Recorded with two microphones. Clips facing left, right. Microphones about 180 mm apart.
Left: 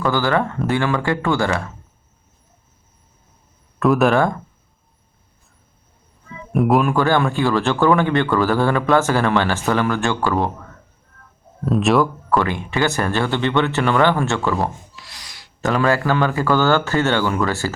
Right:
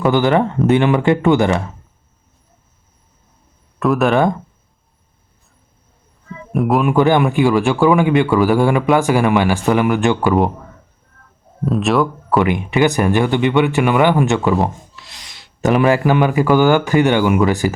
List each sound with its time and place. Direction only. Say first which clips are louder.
0.0 s speech: right 5 dB; 20° right (ahead or behind)
3.8 s speech: even; centre (ahead or behind)
6.5 s speech: even; centre (ahead or behind)
6.8 s speech: right 4 dB; 20° right (ahead or behind)
11.6 s speech: right 1 dB; centre (ahead or behind)
12.4 s speech: right 8 dB; 15° right (ahead or behind)